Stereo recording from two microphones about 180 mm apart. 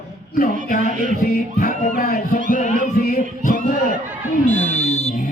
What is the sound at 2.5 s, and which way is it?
Music, 45° left (ahead or behind).